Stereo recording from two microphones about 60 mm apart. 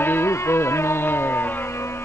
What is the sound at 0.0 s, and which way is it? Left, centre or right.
Music, left.